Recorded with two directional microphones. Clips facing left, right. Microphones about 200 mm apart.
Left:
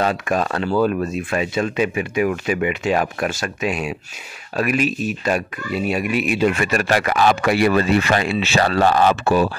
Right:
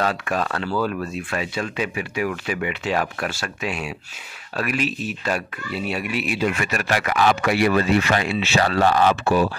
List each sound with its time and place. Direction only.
0.0 s speech: 15° left (ahead or behind)
6.6 s speech: 35° left (ahead or behind)